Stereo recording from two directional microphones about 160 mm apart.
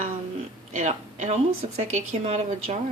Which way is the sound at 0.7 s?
50° right (ahead or behind).